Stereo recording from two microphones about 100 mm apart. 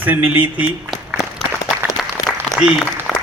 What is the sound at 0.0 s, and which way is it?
Speech, 15° right (ahead or behind).